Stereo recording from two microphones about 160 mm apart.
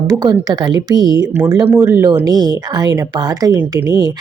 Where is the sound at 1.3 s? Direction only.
15° right (ahead or behind).